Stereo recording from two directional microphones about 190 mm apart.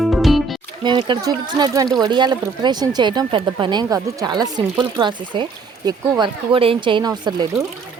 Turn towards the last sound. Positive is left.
turn(degrees=-20)  # may be behind; listen again after turning